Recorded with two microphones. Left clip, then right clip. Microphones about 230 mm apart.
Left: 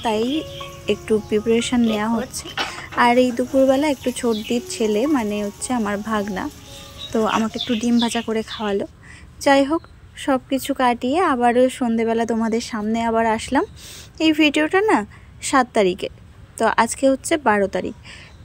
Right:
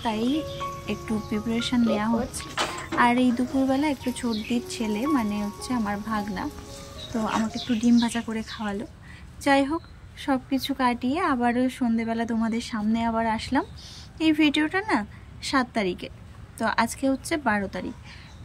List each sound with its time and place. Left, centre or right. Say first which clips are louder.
0.8 s a woman's voice: left 11 dB; centre